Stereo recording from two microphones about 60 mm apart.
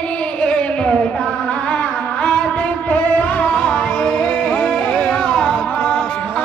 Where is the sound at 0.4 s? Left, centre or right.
Centre.